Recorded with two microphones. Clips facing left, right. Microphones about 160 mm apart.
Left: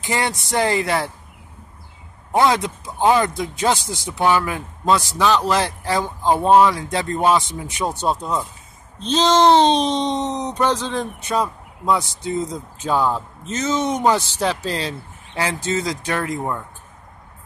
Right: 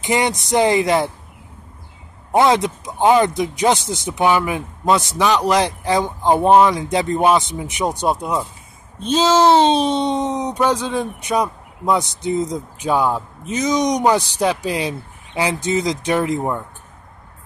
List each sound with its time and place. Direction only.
0.0 s speech: 20° right (ahead or behind)
2.3 s speech: 20° right (ahead or behind)